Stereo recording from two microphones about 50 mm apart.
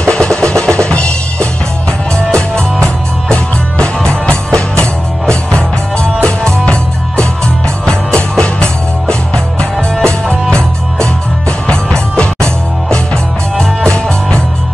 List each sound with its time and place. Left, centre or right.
0.0 s music: centre
0.7 s drum: left
3.3 s music: centre
9.9 s music: centre
10.5 s music: centre